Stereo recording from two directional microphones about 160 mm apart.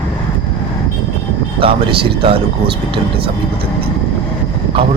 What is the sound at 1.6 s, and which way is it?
Speech, 35° right (ahead or behind).